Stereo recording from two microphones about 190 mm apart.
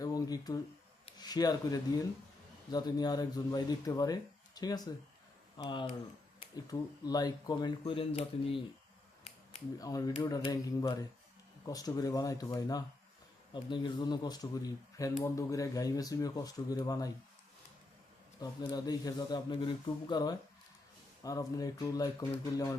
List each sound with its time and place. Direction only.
0.0 s a sound: 20° left (ahead or behind)
1.0 s speech: 20° left (ahead or behind)
9.7 s speech: 20° left (ahead or behind)
18.3 s speech: 20° left (ahead or behind)